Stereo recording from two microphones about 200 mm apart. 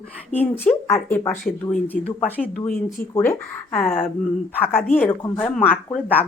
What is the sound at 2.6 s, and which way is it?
Speech, 45° left (ahead or behind).